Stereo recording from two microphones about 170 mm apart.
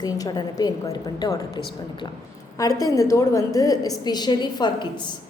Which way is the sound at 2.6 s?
20° left (ahead or behind).